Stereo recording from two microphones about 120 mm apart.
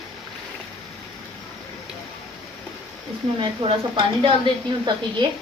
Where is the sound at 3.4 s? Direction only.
45° right (ahead or behind).